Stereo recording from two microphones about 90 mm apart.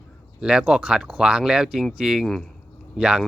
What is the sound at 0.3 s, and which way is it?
Speech, 10° right (ahead or behind).